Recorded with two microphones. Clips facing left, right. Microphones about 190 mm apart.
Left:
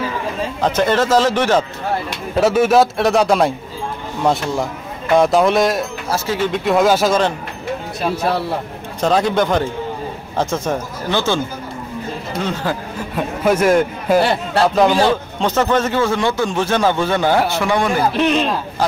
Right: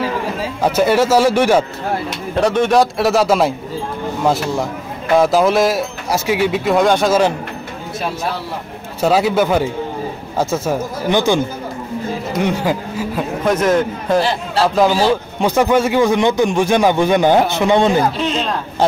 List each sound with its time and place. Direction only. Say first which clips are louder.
0.4 s a man's voice: right 1 dB; 10° right (ahead or behind)
2.3 s a man's voice: left 1 dB; 5° left (ahead or behind)
6.0 s a man's voice: right 4 dB; 15° right (ahead or behind); by 7.2 s centre (ahead or behind)
9.0 s a man's voice: right 2 dB; 5° right (ahead or behind)
13.1 s a man's voice: left 1 dB; 5° left (ahead or behind)
14.6 s a man's voice: even; 5° right (ahead or behind); by 18.0 s 20° right (ahead or behind)